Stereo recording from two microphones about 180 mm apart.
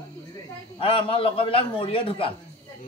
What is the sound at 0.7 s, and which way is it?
A man's voice, 30° left (ahead or behind).